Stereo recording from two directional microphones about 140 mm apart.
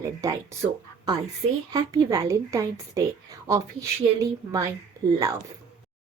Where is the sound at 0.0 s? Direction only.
25° right (ahead or behind).